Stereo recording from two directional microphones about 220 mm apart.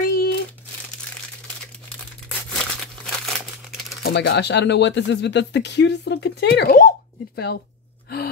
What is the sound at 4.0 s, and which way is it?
Speech, 50° left (ahead or behind).